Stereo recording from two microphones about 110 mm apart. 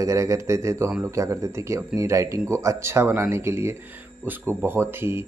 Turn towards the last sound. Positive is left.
turn(degrees=-20)  # may be behind; listen again after turning